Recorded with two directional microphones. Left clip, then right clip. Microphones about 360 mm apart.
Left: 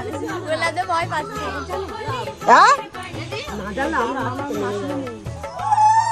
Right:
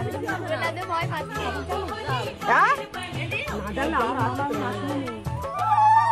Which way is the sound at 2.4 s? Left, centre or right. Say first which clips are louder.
Left 8 dB; left.